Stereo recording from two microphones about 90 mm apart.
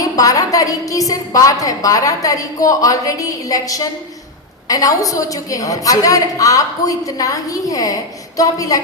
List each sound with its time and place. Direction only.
0.0 s a woman's voice: 40° left (ahead or behind)